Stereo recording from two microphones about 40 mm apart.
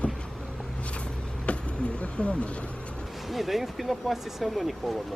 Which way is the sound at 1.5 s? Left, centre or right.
Left.